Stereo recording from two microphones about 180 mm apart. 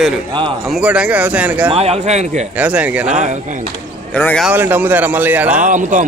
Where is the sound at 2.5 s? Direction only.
10° right (ahead or behind).